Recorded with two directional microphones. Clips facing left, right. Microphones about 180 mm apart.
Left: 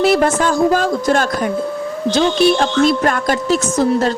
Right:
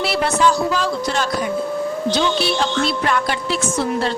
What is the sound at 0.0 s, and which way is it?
A woman's voice, 45° left (ahead or behind).